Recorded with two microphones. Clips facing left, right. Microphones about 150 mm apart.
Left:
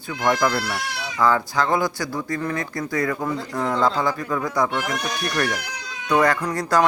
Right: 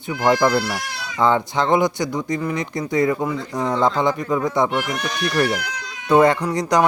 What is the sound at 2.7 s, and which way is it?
Speech, 20° right (ahead or behind).